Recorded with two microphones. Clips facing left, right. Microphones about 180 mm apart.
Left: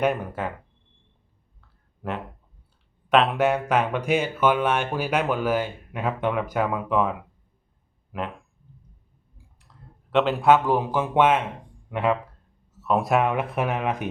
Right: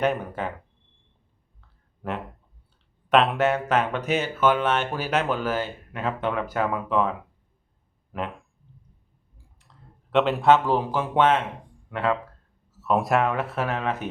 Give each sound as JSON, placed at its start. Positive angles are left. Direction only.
{"t": 0.0, "sound": "speech", "side_deg": 10}
{"t": 2.0, "sound": "speech", "side_deg": 0}
{"t": 3.4, "sound": "speech", "side_deg": 10}
{"t": 9.6, "sound": "clicking", "side_deg": 0}
{"t": 10.5, "sound": "speech", "side_deg": 10}
{"t": 12.7, "sound": "speech", "side_deg": 0}
{"t": 13.2, "sound": "speech", "side_deg": 15}